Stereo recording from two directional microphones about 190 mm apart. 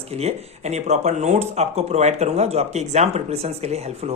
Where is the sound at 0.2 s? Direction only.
35° right (ahead or behind).